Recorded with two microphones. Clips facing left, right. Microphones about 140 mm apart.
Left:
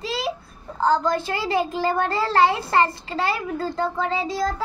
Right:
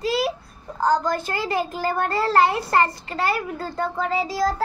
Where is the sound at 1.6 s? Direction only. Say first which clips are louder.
Left 2 dB; 25° left (ahead or behind).